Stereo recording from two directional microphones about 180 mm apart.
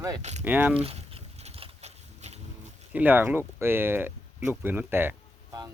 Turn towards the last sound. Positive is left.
turn(degrees=-10)  # may be behind; listen again after turning